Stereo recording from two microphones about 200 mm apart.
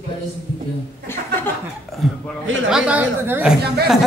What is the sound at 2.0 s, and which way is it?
A man's voice, centre (ahead or behind).